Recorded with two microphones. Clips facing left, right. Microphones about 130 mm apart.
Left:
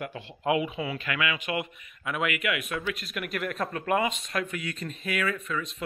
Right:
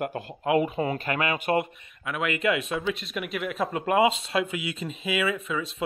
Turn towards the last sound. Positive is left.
turn(degrees=-5)  # may be behind; listen again after turning